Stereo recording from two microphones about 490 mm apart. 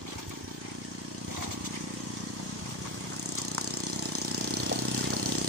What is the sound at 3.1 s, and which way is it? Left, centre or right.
Vehicle, right.